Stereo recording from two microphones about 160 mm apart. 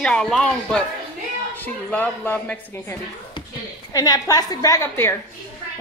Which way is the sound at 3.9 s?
25° left (ahead or behind).